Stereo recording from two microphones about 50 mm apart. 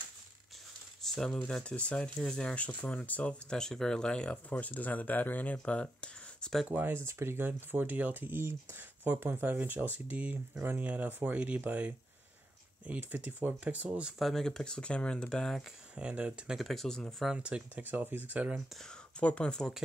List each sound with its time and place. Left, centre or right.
1.0 s speech: centre
1.6 s speech: left
2.5 s speech: left
3.5 s speech: centre
4.5 s speech: left
6.7 s speech: right
10.6 s speech: right
14.1 s speech: centre
14.4 s speech: centre
15.9 s speech: right
16.5 s speech: centre
17.4 s speech: right
17.7 s speech: right
19.1 s speech: left